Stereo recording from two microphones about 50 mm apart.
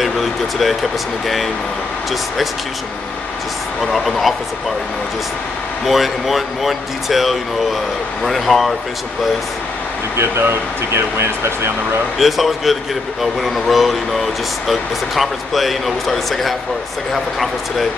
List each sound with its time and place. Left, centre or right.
0.0 s speech: centre
3.8 s speech: centre
5.9 s speech: centre
11.0 s speech: right
12.2 s speech: centre